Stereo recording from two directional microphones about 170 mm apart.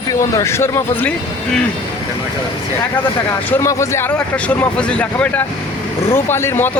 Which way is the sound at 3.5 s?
15° left (ahead or behind).